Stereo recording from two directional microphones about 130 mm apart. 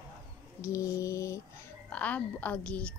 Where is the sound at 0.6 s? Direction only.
25° left (ahead or behind).